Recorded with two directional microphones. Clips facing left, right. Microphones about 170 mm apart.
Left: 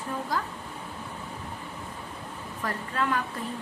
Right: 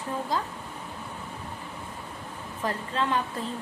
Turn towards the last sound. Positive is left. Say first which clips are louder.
# right 1 dB
turn(degrees=-25)  # may be behind; listen again after turning